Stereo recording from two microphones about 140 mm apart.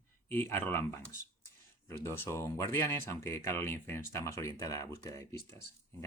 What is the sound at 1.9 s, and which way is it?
Speech, 15° left (ahead or behind).